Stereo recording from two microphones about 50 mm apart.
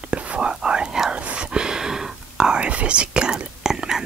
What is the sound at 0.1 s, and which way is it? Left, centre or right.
Whispering, right.